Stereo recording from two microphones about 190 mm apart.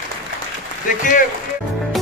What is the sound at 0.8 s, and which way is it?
Speech, 45° left (ahead or behind).